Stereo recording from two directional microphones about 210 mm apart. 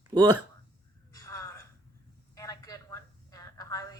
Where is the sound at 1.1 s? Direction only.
15° left (ahead or behind).